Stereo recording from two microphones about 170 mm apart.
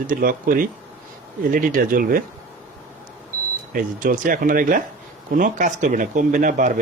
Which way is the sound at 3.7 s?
55° right (ahead or behind).